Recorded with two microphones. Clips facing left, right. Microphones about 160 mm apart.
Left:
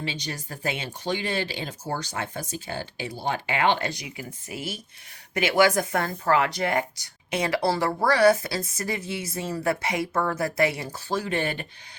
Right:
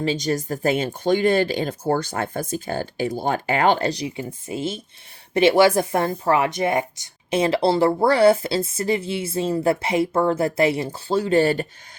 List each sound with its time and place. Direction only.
0.0 s a woman's voice: 40° right (ahead or behind)